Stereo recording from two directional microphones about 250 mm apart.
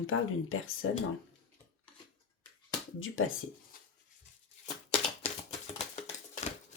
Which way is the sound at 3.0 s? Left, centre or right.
Left.